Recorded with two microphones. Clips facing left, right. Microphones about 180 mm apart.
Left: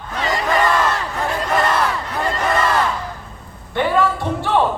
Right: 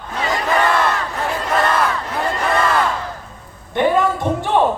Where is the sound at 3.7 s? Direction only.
20° right (ahead or behind).